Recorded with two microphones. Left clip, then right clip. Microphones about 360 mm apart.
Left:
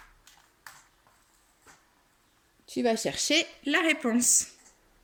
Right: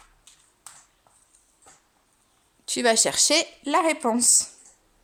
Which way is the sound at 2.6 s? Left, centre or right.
Right.